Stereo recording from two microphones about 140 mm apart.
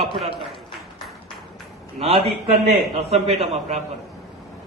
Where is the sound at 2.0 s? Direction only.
45° right (ahead or behind).